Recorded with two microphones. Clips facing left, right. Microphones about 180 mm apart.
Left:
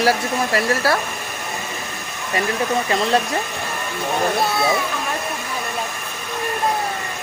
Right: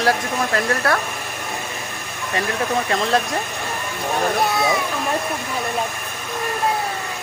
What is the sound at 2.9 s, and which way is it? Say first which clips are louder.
Speech: left 1 dB; centre (ahead or behind).